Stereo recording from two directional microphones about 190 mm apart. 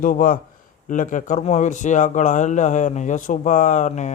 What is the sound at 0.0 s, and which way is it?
Speech, 45° left (ahead or behind).